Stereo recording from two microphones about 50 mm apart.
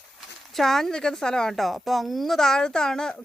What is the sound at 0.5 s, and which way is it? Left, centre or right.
Speech, centre.